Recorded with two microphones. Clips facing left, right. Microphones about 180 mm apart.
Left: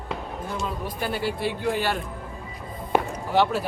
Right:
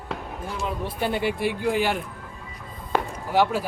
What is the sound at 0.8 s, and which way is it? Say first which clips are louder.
A man's voice: right 4 dB; 25° right (ahead or behind).